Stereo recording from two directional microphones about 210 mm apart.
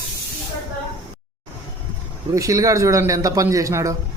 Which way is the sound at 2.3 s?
15° right (ahead or behind).